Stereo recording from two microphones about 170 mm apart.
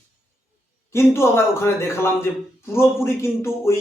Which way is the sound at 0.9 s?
15° left (ahead or behind).